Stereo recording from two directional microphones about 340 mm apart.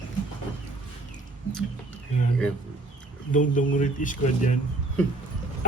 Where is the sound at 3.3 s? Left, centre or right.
Left.